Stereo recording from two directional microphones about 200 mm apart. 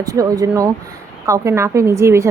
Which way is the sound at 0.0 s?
15° right (ahead or behind).